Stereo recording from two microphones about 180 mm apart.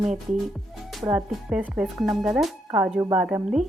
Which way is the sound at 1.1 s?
5° right (ahead or behind).